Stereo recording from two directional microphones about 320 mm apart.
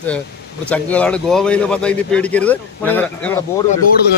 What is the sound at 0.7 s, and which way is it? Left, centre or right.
A man's voice, centre.